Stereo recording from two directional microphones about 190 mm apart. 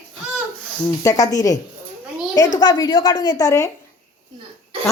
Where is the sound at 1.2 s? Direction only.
15° left (ahead or behind).